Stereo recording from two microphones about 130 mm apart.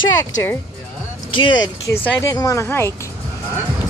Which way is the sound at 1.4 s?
35° left (ahead or behind).